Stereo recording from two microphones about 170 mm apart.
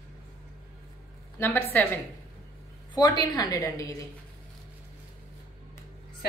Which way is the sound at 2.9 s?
25° left (ahead or behind).